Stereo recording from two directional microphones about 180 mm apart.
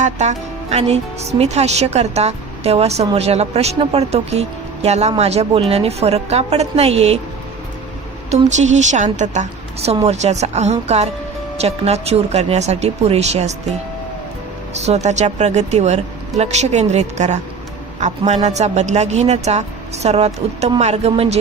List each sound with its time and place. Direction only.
0.0 s speech: 40° right (ahead or behind)
8.3 s speech: 40° right (ahead or behind)
18.4 s speech: 40° right (ahead or behind)